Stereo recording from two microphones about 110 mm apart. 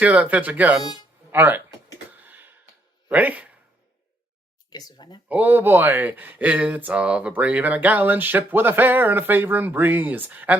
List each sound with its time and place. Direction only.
0.0 s speech: 15° right (ahead or behind)
2.0 s a sound: 15° right (ahead or behind)
3.1 s speech: 15° right (ahead or behind)
4.7 s speech: 35° left (ahead or behind)
5.3 s speech: 15° right (ahead or behind)